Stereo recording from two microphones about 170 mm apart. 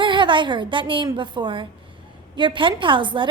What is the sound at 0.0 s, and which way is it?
A woman's voice, 30° right (ahead or behind).